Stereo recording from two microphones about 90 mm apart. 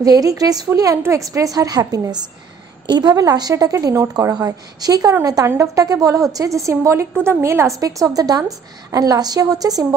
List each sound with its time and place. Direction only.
0.0 s a woman's voice: 40° right (ahead or behind)